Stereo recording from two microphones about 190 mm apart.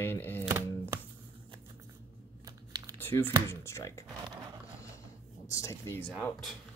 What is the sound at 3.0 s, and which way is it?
Speech, 10° left (ahead or behind).